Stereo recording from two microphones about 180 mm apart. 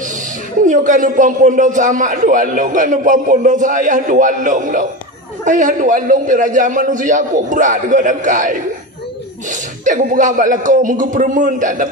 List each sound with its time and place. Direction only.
0.6 s a man's voice: 45° right (ahead or behind)